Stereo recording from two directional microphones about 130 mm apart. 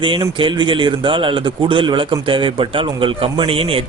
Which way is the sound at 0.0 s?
40° right (ahead or behind).